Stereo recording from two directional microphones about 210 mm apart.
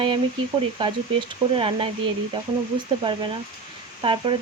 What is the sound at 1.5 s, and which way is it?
Speech, 25° right (ahead or behind).